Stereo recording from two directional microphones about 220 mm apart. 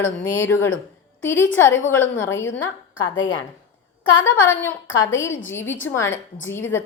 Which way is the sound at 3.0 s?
60° left (ahead or behind).